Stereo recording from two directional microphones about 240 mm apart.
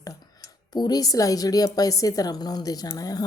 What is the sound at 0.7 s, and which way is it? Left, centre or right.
Speech, centre.